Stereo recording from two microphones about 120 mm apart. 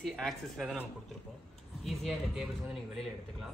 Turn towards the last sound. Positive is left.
turn(degrees=0)  # may be behind; listen again after turning